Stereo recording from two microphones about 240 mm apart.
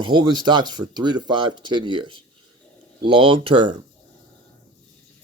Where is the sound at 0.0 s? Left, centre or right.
Centre.